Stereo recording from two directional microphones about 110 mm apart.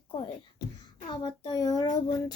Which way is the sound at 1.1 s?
40° left (ahead or behind).